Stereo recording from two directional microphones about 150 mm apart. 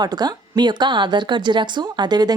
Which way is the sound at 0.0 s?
25° right (ahead or behind).